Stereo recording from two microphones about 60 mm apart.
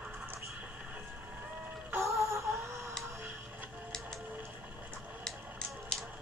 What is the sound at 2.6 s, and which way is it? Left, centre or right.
Tick-tock, right.